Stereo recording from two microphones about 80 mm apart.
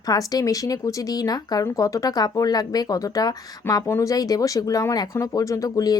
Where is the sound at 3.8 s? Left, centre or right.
Left.